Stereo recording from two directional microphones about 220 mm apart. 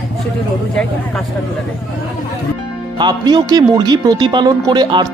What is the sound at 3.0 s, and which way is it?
Speech, 20° right (ahead or behind).